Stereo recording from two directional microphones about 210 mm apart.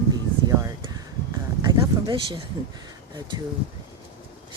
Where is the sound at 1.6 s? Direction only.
20° right (ahead or behind).